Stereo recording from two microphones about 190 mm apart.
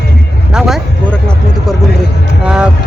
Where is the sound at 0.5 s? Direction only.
5° right (ahead or behind).